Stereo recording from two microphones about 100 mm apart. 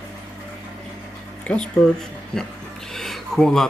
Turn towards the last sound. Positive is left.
turn(degrees=5)  # may be behind; listen again after turning